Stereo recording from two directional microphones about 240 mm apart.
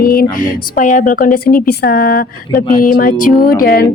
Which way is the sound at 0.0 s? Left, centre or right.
Left.